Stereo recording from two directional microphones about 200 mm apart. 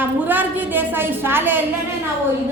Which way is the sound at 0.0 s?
10° right (ahead or behind).